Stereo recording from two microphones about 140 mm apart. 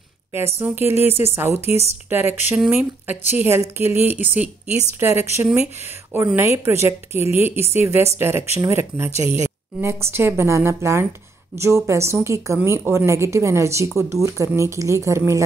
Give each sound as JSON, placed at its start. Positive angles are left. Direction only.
{"t": 0.6, "sound": "speech", "side_deg": -15}